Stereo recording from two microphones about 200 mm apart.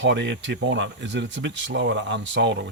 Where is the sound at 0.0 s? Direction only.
60° right (ahead or behind).